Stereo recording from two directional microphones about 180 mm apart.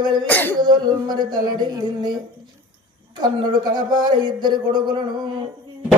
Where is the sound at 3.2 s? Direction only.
25° right (ahead or behind).